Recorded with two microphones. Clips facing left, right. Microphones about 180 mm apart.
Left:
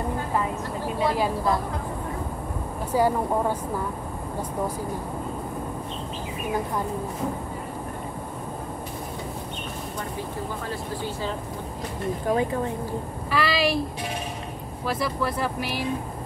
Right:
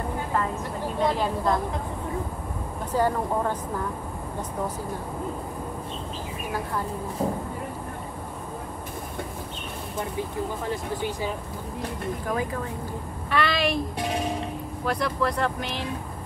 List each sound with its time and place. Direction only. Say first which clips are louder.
0.9 s speech: left 1 dB; 5° left (ahead or behind)
2.9 s speech: left 2 dB; 10° left (ahead or behind)
10.7 s speech: right 2 dB; 15° right (ahead or behind)
12.3 s speech: left 6 dB; 30° left (ahead or behind)
13.3 s a sound: left 1 dB; centre (ahead or behind)
14.9 s speech: right 1 dB; 5° left (ahead or behind)